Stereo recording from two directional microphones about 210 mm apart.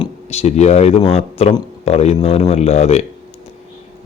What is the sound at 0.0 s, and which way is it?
A man's voice, 30° left (ahead or behind).